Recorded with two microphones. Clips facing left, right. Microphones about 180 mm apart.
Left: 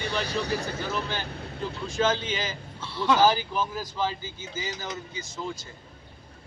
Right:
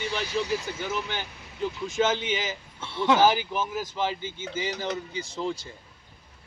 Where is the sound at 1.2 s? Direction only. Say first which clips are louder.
Left 10 dB; 60° left (ahead or behind).